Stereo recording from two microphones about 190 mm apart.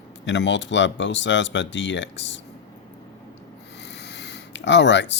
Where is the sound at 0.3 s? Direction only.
70° left (ahead or behind).